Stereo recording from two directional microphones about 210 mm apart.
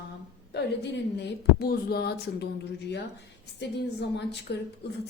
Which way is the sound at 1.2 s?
50° left (ahead or behind).